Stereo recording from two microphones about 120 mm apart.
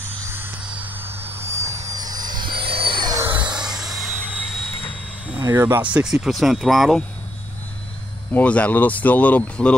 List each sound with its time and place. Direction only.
0.3 s a sound: 20° right (ahead or behind)
0.7 s vehicle: 15° right (ahead or behind); by 3.1 s 45° right (ahead or behind)
3.3 s a sound: 10° right (ahead or behind)
5.4 s speech: 25° right (ahead or behind)
5.8 s speech: 10° right (ahead or behind)
8.3 s speech: 10° left (ahead or behind)